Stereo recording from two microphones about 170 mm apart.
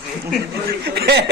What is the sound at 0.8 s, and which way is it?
Speech, 70° right (ahead or behind).